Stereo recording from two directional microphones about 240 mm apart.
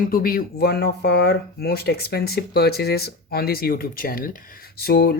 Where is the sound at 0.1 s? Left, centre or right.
Left.